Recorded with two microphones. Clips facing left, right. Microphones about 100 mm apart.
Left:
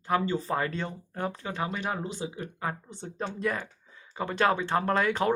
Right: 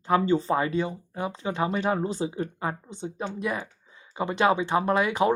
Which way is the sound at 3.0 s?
10° right (ahead or behind).